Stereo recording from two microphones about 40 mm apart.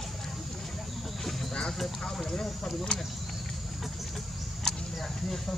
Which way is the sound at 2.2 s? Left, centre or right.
Centre.